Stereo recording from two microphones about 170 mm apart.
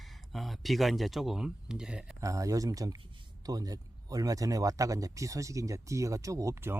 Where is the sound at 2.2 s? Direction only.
20° right (ahead or behind).